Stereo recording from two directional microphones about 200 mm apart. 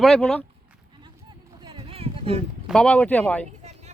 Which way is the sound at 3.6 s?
35° right (ahead or behind).